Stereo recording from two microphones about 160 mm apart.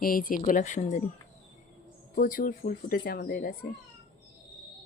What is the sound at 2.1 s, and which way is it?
Speech, 60° left (ahead or behind).